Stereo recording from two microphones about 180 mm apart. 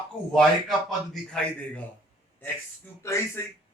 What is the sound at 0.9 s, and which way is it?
Speech, 5° left (ahead or behind).